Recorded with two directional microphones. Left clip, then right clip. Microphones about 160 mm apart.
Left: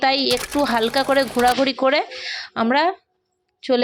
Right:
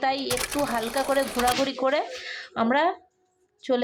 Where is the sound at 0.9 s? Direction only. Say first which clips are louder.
Left 6 dB; 25° left (ahead or behind).